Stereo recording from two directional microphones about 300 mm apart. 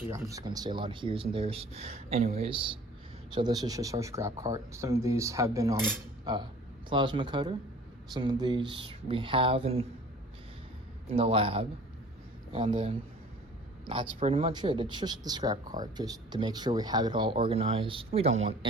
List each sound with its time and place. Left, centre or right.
0.0 s speech: centre
11.1 s speech: centre